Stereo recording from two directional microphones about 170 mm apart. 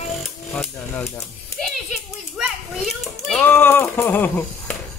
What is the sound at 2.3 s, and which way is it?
Children playing, centre (ahead or behind).